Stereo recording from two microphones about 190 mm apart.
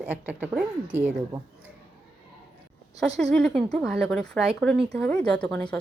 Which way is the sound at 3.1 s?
Centre (ahead or behind).